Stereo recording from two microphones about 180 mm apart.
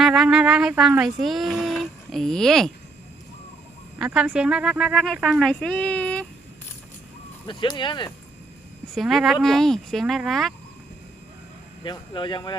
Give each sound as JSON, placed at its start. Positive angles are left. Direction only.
{"t": 0.0, "sound": "speech", "side_deg": 0}
{"t": 3.9, "sound": "speech", "side_deg": -5}
{"t": 7.4, "sound": "speech", "side_deg": 25}
{"t": 9.0, "sound": "speech", "side_deg": 0}
{"t": 11.8, "sound": "speech", "side_deg": 25}